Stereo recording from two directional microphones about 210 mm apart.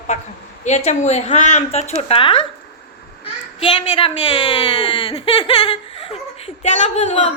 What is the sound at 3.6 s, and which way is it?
A woman's voice, 25° left (ahead or behind).